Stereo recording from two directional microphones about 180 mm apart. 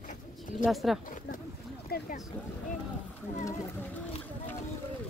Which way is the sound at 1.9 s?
55° left (ahead or behind).